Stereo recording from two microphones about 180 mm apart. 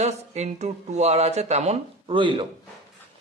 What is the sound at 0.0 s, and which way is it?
A man's voice, 40° right (ahead or behind).